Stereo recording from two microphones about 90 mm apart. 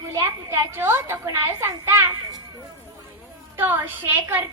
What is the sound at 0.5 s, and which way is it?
A child's voice, 25° right (ahead or behind).